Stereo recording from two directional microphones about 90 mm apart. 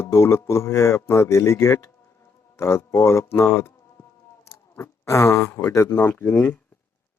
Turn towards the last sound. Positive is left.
turn(degrees=30)  # may be behind; listen again after turning